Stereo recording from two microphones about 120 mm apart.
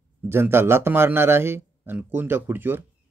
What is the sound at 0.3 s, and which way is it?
Speech, 20° right (ahead or behind).